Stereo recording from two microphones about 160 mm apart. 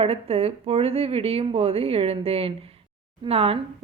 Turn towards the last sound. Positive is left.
turn(degrees=-35)  # may be behind; listen again after turning